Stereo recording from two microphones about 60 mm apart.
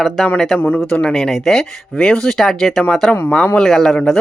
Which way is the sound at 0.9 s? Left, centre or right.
Centre.